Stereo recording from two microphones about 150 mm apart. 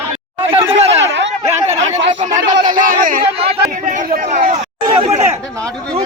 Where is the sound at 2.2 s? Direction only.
55° right (ahead or behind).